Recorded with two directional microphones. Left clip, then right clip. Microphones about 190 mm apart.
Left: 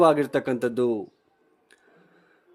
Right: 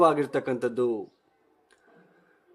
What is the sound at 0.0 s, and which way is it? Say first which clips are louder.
Speech: left 3 dB; 25° left (ahead or behind).